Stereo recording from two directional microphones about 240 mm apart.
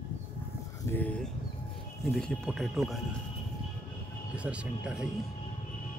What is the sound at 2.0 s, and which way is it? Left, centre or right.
Speech, centre.